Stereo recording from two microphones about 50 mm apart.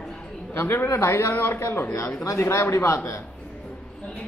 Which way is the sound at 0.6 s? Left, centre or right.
Left.